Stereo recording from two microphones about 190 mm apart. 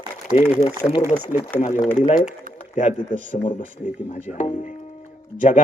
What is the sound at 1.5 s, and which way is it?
Speech, 40° left (ahead or behind).